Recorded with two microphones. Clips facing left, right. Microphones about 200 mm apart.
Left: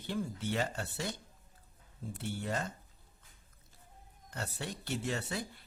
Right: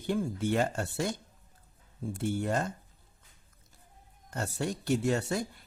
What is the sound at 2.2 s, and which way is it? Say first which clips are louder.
Speech: right 7 dB; 50° right (ahead or behind).